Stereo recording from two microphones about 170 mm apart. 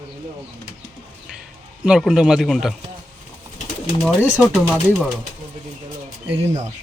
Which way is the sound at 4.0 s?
5° right (ahead or behind).